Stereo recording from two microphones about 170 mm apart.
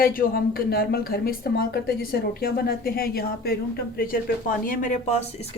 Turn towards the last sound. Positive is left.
turn(degrees=35)  # may be behind; listen again after turning